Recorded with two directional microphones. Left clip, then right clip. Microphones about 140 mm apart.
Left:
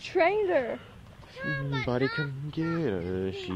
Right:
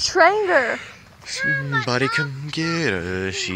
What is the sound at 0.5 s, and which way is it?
Speech, 75° right (ahead or behind).